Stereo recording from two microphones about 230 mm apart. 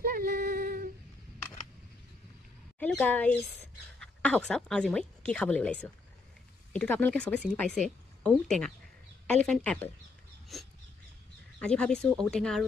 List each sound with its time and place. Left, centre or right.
0.0 s female singing: right
2.8 s a woman's voice: centre